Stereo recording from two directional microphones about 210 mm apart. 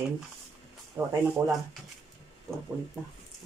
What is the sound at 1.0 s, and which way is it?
Speech, 10° right (ahead or behind).